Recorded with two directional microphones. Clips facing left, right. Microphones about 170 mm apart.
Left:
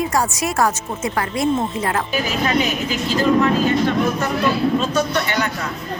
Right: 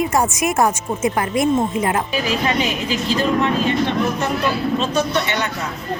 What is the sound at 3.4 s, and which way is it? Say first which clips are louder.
Speech: left 2 dB; 25° right (ahead or behind).